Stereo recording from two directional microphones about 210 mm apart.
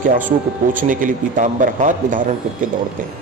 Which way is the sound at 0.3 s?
40° right (ahead or behind).